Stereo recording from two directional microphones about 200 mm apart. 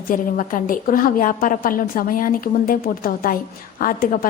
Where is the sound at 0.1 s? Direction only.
45° left (ahead or behind).